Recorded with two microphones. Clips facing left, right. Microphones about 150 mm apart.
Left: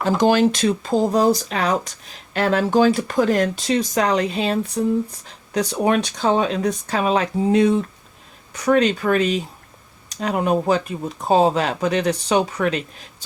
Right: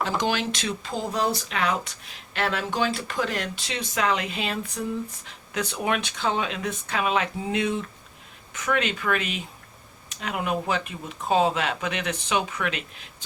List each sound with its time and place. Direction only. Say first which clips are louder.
0.0 s speech: left 10 dB; 45° left (ahead or behind)